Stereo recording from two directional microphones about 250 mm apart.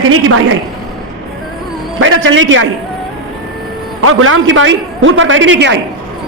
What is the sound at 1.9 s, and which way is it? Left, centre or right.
Speech, right.